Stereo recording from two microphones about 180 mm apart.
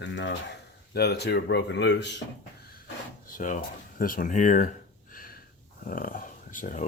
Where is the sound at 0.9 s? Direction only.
65° left (ahead or behind).